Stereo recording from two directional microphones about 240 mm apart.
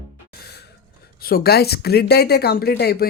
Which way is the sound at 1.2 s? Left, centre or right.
Left.